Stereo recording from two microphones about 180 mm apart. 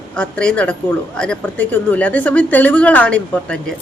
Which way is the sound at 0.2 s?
5° left (ahead or behind).